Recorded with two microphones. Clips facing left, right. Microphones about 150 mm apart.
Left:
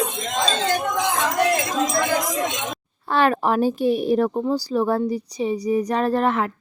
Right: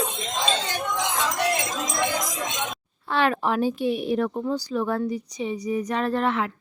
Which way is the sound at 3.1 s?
40° left (ahead or behind).